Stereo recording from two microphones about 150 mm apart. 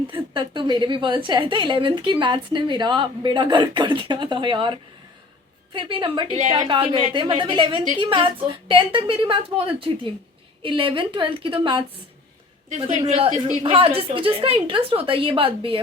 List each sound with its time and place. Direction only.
0.1 s a woman's voice: 30° right (ahead or behind)
13.7 s a woman's voice: 40° right (ahead or behind)